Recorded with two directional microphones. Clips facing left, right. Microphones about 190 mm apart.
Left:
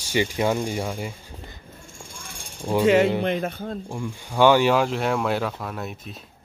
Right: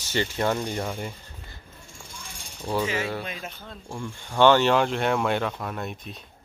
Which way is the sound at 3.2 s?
60° left (ahead or behind).